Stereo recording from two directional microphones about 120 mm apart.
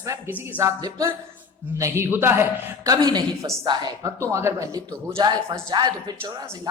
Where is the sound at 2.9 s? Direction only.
35° right (ahead or behind).